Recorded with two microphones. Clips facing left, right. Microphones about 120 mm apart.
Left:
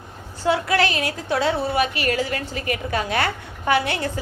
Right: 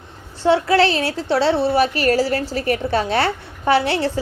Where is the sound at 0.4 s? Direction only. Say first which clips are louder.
Right 5 dB; 30° right (ahead or behind).